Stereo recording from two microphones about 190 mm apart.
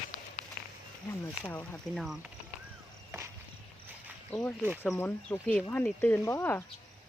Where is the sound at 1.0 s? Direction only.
10° left (ahead or behind).